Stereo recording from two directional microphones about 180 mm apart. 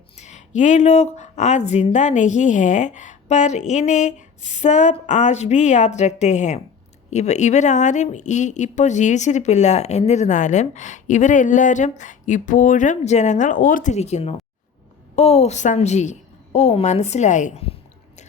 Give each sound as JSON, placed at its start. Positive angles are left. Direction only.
{"t": 0.2, "sound": "speech", "side_deg": 40}